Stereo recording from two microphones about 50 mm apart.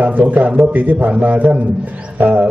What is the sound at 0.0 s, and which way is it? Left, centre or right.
A man's voice, right.